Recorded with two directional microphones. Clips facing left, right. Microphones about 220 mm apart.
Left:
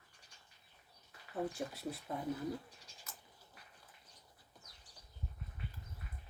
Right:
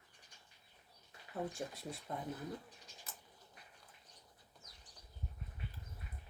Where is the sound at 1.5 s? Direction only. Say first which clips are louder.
Left 3 dB; centre (ahead or behind).